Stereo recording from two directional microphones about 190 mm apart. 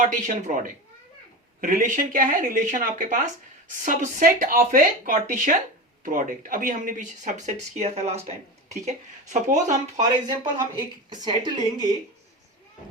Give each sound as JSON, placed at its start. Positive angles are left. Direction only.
{"t": 0.0, "sound": "speech", "side_deg": -40}
{"t": 1.6, "sound": "speech", "side_deg": -45}
{"t": 10.0, "sound": "speech", "side_deg": -20}